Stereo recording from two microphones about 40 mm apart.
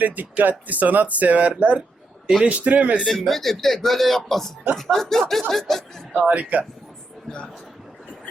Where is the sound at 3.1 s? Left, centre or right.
Centre.